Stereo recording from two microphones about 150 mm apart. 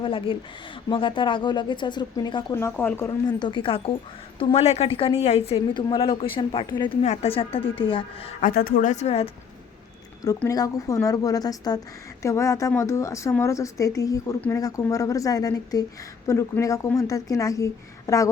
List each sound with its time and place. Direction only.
0.0 s a woman's voice: 35° left (ahead or behind); by 3.2 s 15° left (ahead or behind)
3.2 s a woman's voice: 30° left (ahead or behind)
5.5 s speech: 30° left (ahead or behind)
7.0 s speech: 45° left (ahead or behind)
8.4 s speech: 70° left (ahead or behind); by 9.3 s 45° left (ahead or behind)
10.5 s a woman's voice: 20° left (ahead or behind)